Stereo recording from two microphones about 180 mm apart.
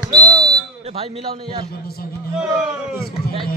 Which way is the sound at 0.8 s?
35° right (ahead or behind).